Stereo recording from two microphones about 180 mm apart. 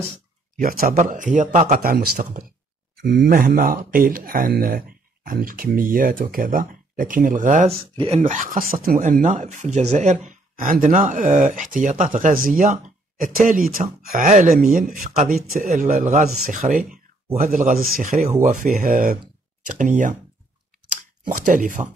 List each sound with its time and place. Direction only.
0.6 s speech: 50° right (ahead or behind)
21.3 s speech: 45° right (ahead or behind)